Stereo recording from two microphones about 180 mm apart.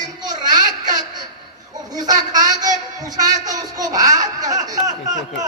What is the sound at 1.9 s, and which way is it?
A man's voice, 20° right (ahead or behind).